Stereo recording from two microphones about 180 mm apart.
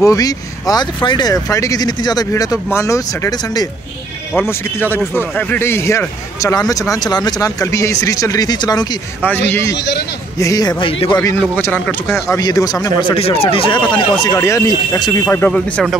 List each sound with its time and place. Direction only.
0.0 s speech: 20° left (ahead or behind)
9.2 s speech: 10° left (ahead or behind); by 11.1 s 30° left (ahead or behind)
11.5 s speech: 10° left (ahead or behind); by 14.0 s 30° left (ahead or behind)
14.2 s speech: 15° left (ahead or behind); by 16.0 s centre (ahead or behind)